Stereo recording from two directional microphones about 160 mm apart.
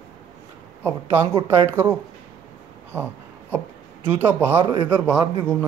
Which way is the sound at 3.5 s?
15° right (ahead or behind).